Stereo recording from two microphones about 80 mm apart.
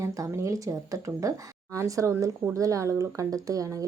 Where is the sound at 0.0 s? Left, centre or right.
Right.